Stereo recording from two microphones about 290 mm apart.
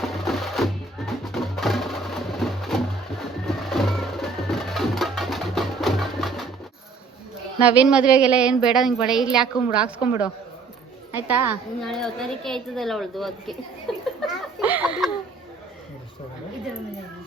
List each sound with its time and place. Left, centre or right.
0.0 s music: centre
7.6 s a woman's voice: centre
11.4 s a woman's voice: centre
14.3 s chicken: centre